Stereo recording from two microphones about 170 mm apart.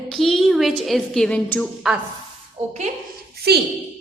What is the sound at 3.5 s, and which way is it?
Speech, 70° right (ahead or behind).